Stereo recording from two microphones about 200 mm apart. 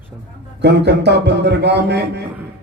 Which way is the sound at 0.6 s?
60° right (ahead or behind).